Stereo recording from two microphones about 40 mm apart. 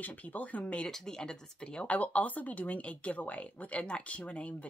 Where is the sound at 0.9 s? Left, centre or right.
Centre.